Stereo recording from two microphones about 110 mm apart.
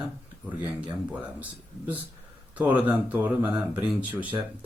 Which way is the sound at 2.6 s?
15° right (ahead or behind).